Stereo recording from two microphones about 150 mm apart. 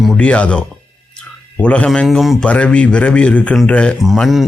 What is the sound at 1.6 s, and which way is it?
Speech, 10° left (ahead or behind).